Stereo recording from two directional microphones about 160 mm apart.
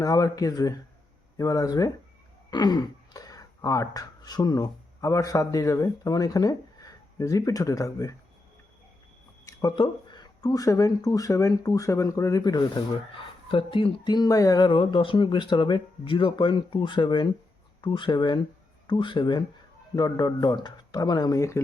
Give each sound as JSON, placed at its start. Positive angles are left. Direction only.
{"t": 0.0, "sound": "speech", "side_deg": 20}
{"t": 9.5, "sound": "speech", "side_deg": 20}